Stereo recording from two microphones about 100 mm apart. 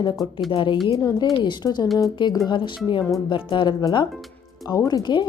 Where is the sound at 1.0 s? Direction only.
40° left (ahead or behind).